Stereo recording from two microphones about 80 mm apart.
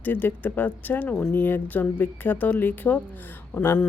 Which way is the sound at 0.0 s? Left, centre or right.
Left.